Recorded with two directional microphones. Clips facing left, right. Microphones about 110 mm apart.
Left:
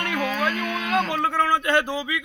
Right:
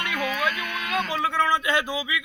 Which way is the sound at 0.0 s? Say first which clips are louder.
Left 2 dB; 30° left (ahead or behind).